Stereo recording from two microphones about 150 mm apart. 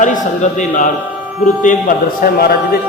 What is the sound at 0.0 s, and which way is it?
A man's voice, 55° left (ahead or behind).